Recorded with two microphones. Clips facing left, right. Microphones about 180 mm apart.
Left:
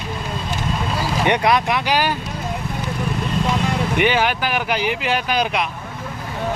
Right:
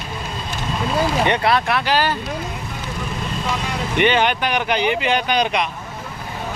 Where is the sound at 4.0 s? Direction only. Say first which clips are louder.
Right 3 dB; 5° left (ahead or behind).